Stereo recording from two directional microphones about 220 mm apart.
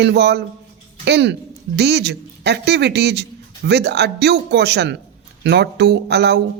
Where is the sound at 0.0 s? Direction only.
50° right (ahead or behind).